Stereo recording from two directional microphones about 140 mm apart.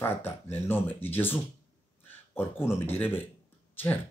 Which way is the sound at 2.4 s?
15° left (ahead or behind).